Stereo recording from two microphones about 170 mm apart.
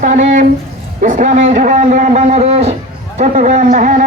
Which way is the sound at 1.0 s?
45° right (ahead or behind).